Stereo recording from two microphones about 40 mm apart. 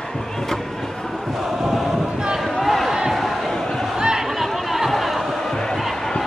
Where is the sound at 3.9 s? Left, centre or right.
Centre.